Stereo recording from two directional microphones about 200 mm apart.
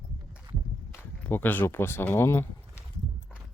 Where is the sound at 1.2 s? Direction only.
10° left (ahead or behind).